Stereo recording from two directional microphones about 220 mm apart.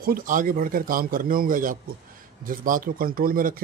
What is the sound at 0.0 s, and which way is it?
Speech, 40° right (ahead or behind).